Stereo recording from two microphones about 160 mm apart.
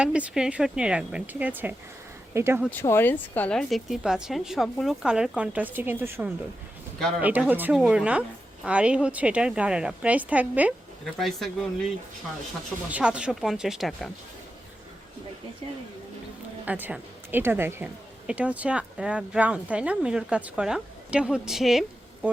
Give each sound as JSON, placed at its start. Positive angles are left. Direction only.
{"t": 0.0, "sound": "speech", "side_deg": -5}
{"t": 2.6, "sound": "a woman's voice", "side_deg": 15}
{"t": 11.0, "sound": "a woman's voice", "side_deg": 0}
{"t": 12.9, "sound": "a woman's voice", "side_deg": -5}
{"t": 16.6, "sound": "speech", "side_deg": -10}